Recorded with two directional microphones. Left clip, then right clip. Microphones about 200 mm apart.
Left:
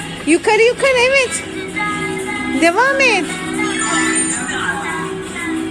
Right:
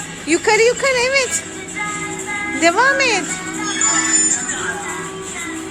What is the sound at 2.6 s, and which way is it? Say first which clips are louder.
Speech: left 1 dB; 15° left (ahead or behind).